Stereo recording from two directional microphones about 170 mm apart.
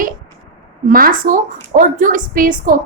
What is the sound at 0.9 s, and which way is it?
A woman's voice, 55° right (ahead or behind).